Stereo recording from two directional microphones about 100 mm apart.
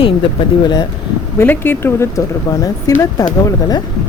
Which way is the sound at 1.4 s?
20° left (ahead or behind).